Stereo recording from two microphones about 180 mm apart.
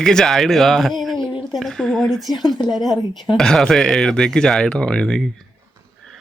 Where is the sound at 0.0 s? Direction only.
5° left (ahead or behind).